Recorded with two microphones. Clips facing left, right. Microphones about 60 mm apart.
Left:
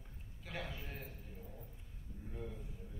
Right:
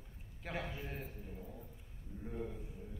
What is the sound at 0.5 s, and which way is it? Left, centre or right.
Speech, right.